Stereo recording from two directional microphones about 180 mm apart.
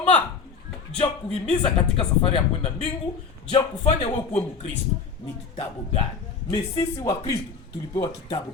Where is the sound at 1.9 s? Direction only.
35° left (ahead or behind).